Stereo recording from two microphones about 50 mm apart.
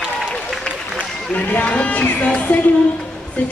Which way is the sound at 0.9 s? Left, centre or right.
Left.